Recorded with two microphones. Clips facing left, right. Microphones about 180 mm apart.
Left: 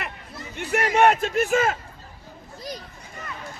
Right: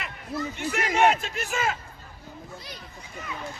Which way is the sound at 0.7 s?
50° left (ahead or behind).